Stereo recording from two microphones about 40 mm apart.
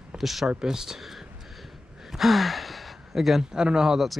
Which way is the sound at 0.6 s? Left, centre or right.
Centre.